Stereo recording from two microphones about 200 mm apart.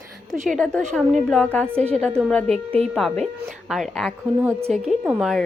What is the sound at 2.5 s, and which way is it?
Speech, 30° right (ahead or behind).